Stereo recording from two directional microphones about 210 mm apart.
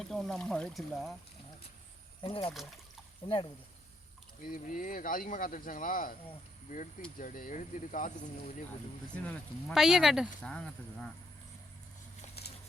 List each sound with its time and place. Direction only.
0.0 s speech: centre (ahead or behind)
2.2 s speech: 25° left (ahead or behind)
4.4 s speech: 40° left (ahead or behind)
7.2 s speech: 40° left (ahead or behind)
9.1 s speech: 5° left (ahead or behind)
12.4 s horse: 50° left (ahead or behind)